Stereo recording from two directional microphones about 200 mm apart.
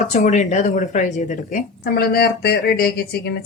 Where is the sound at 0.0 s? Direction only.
35° left (ahead or behind).